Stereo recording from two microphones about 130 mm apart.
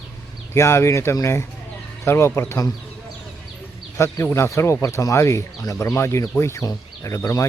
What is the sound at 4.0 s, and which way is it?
Speech, 20° left (ahead or behind).